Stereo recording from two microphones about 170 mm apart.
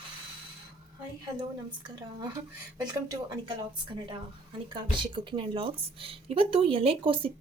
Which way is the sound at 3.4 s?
30° right (ahead or behind).